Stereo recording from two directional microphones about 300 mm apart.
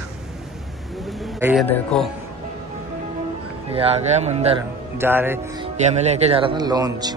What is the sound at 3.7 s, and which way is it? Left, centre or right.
Speech, centre.